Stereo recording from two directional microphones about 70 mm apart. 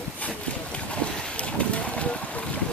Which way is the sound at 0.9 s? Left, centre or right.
Centre.